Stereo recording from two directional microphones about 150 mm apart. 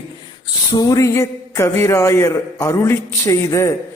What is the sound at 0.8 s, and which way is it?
A man's voice, 25° left (ahead or behind).